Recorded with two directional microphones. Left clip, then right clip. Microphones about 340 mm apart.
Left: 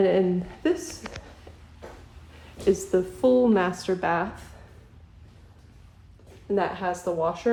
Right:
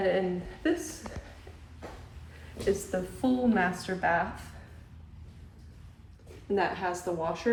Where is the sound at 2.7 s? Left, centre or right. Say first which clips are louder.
Left 7 dB; centre.